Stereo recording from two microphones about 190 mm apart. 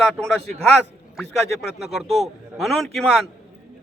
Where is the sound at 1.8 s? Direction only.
Centre (ahead or behind).